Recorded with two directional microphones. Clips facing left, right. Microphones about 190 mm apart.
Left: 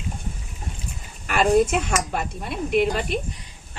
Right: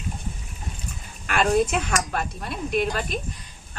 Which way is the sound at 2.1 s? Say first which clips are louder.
Left 2 dB; 20° left (ahead or behind).